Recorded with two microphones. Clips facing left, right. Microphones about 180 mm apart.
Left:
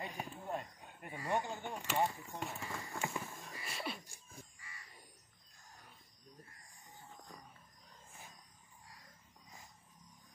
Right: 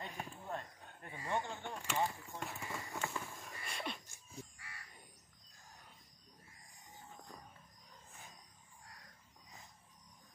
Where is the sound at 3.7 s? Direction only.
5° left (ahead or behind).